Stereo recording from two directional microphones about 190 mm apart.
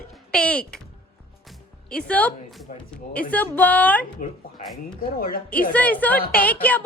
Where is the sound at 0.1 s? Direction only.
5° left (ahead or behind).